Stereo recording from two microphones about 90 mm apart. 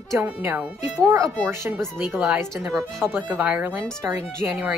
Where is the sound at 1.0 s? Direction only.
30° right (ahead or behind).